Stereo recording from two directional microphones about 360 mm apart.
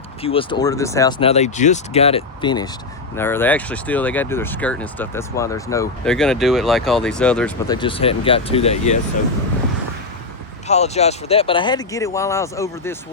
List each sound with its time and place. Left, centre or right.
0.2 s speech: centre
10.7 s speech: centre